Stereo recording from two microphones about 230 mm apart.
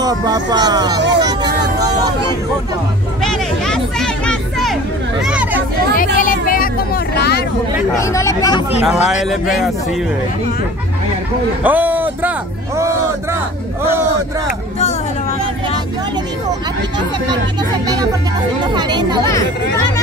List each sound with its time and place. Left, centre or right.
0.0 s speech: centre
1.1 s a sound: centre
3.2 s music: centre
5.2 s hubbub: centre
6.1 s vehicle: left
8.0 s speech: centre
8.8 s speech: centre
11.6 s music: centre
18.7 s speech: centre